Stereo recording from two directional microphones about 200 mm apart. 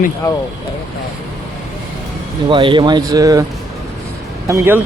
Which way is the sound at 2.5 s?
25° right (ahead or behind).